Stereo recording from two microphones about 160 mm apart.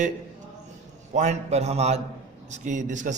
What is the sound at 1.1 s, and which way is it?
A man's voice, 45° right (ahead or behind).